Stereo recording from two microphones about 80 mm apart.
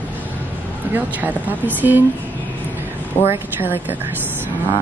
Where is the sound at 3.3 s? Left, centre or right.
Right.